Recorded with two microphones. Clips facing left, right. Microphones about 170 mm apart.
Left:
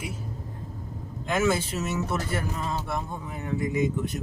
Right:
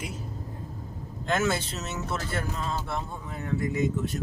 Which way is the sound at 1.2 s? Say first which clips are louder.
Left 2 dB; 10° left (ahead or behind).